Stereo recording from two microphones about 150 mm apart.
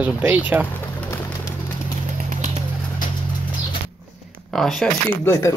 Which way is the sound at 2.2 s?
55° right (ahead or behind).